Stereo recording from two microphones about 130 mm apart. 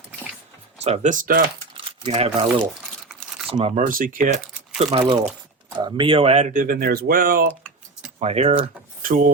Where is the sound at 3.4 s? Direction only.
50° right (ahead or behind).